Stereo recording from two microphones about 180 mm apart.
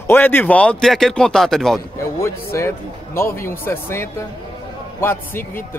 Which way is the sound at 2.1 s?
15° left (ahead or behind).